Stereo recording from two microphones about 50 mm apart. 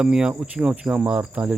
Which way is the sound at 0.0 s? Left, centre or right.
Centre.